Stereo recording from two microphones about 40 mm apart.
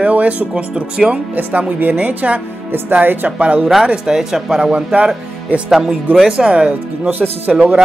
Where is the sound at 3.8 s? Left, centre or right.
Centre.